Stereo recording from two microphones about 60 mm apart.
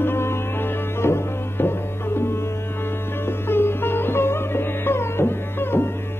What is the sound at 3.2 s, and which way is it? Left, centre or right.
Sitar, left.